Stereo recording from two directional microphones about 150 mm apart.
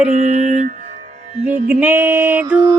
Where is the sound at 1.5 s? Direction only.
10° right (ahead or behind).